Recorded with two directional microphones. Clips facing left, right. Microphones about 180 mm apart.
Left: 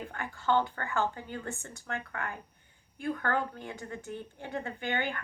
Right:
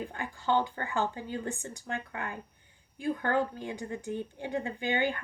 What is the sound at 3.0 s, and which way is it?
Speech, 15° right (ahead or behind).